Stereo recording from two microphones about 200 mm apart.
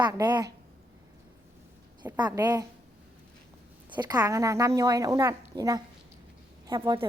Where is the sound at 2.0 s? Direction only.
20° right (ahead or behind).